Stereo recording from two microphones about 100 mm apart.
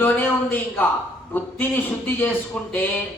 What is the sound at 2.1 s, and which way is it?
Speech, 20° left (ahead or behind).